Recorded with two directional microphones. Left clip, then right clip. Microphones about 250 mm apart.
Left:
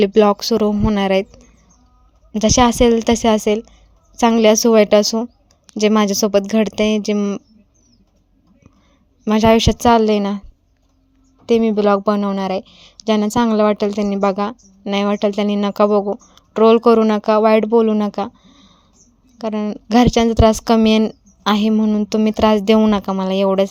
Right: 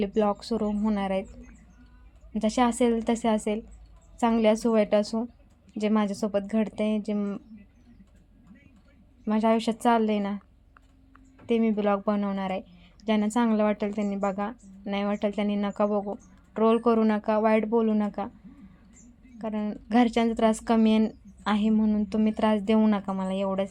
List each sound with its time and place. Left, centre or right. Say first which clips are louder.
0.0 s a woman's voice: left 13 dB; left
2.3 s a woman's voice: left 11 dB; left
9.2 s a woman's voice: left 12 dB; left
11.4 s a woman's voice: left 11 dB; left